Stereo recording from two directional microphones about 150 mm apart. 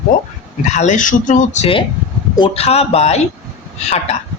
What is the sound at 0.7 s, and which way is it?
Speech, 55° left (ahead or behind).